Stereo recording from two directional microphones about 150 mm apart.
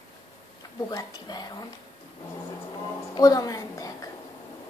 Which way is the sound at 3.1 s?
25° left (ahead or behind).